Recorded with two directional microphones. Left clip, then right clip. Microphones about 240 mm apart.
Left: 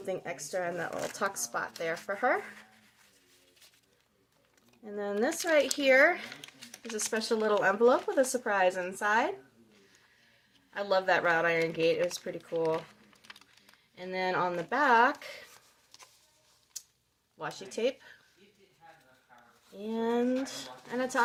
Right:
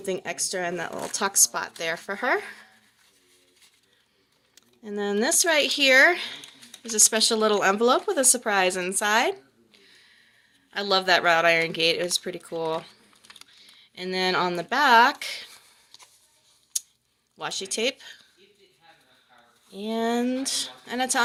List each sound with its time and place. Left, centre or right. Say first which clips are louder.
0.0 s speech: right 7 dB; right
4.5 s speech: right 7 dB; right
10.7 s speech: right 6 dB; right
13.9 s speech: right 7 dB; right
17.3 s speech: right 8 dB; right
19.8 s speech: right 4 dB; right